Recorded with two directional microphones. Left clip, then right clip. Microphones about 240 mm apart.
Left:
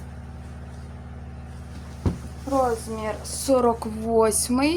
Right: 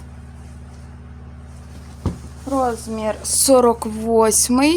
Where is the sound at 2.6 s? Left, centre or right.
Right.